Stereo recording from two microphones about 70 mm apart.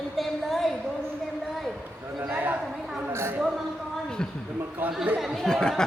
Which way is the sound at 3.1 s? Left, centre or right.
Right.